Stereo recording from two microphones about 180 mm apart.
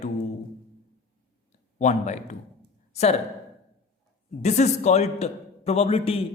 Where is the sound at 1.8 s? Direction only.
40° left (ahead or behind).